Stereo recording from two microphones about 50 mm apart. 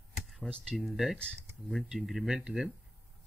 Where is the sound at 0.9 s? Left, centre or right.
Centre.